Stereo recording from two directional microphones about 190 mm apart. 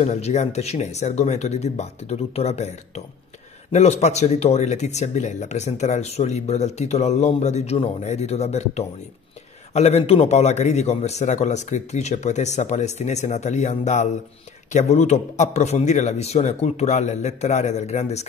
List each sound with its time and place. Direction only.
0.0 s speech: 35° left (ahead or behind)